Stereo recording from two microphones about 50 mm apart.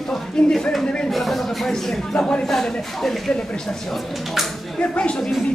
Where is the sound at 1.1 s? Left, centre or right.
Centre.